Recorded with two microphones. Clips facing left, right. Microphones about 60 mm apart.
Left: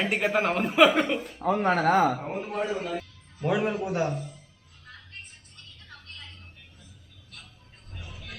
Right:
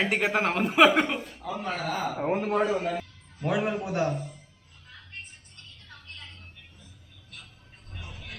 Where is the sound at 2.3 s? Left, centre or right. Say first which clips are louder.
Right 6 dB; right.